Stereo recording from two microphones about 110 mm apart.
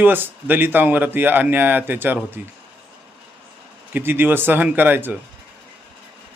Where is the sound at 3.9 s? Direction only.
20° right (ahead or behind).